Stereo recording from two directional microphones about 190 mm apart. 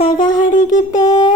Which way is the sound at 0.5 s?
45° left (ahead or behind).